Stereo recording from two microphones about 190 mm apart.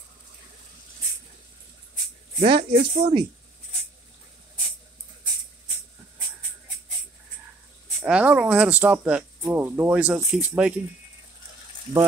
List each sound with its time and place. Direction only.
2.4 s speech: 25° right (ahead or behind)
8.0 s speech: 5° right (ahead or behind)